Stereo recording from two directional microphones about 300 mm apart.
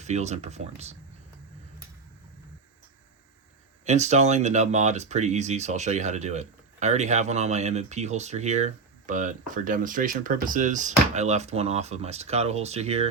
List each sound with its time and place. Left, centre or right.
0.0 s speech: right
3.8 s speech: right